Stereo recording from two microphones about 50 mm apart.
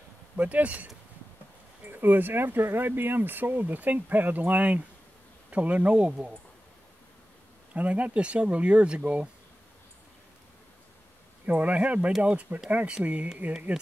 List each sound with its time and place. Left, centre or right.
0.4 s speech: right
1.9 s speech: right
7.7 s speech: right
11.4 s speech: right